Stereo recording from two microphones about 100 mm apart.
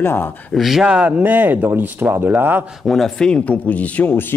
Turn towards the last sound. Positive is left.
turn(degrees=20)  # may be behind; listen again after turning